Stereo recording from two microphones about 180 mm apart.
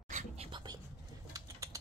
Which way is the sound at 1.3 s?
20° right (ahead or behind).